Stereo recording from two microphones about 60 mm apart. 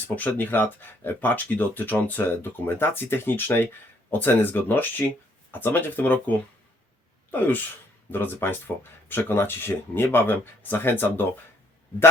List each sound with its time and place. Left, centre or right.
0.2 s speech: left